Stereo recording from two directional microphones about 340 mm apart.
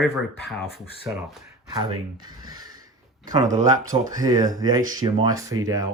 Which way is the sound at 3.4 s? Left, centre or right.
Centre.